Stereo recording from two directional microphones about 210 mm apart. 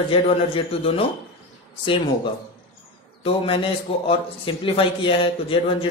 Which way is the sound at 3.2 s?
25° left (ahead or behind).